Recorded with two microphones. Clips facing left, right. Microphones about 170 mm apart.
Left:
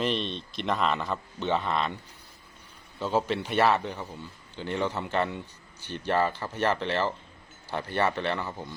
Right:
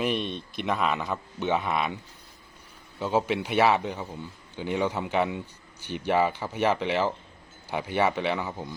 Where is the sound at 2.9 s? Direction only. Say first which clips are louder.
Right 1 dB; 10° right (ahead or behind).